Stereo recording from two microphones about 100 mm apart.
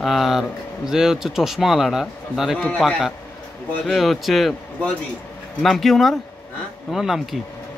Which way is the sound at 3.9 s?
Centre (ahead or behind).